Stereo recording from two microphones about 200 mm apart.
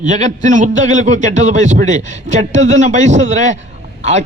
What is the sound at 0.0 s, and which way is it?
A man's voice, 35° right (ahead or behind).